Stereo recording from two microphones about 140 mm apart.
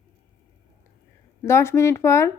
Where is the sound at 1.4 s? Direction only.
20° left (ahead or behind).